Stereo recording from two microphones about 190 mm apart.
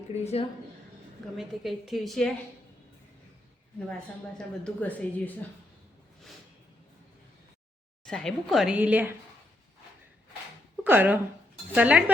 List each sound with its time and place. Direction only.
0.1 s speech: 35° left (ahead or behind)
1.4 s a woman's voice: centre (ahead or behind)
4.4 s speech: 5° left (ahead or behind)
8.0 s a woman's voice: 5° left (ahead or behind)
10.8 s speech: 10° right (ahead or behind)